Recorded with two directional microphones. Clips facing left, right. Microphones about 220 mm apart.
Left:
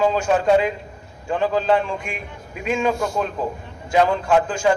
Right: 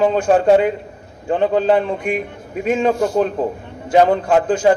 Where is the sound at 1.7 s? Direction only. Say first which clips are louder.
Right 4 dB; 35° right (ahead or behind).